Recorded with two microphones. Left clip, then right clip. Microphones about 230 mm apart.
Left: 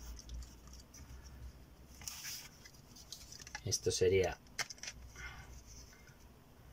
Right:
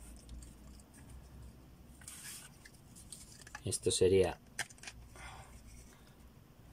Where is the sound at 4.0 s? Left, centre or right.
Right.